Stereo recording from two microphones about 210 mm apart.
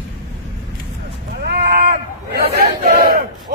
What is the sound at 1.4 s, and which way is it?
Speech, 45° right (ahead or behind).